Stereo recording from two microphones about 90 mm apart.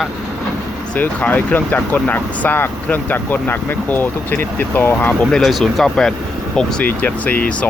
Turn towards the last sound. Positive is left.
turn(degrees=15)  # may be behind; listen again after turning